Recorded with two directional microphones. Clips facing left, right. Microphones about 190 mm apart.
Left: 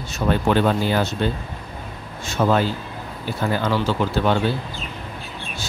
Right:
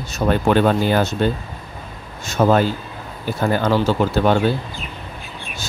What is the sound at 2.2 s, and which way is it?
Speech, 45° right (ahead or behind).